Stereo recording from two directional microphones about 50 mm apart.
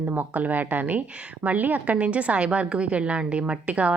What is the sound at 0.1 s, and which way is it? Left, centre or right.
A woman's voice, right.